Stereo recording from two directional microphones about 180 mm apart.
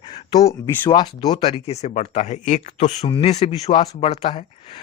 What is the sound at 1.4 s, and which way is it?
Speech, 35° left (ahead or behind).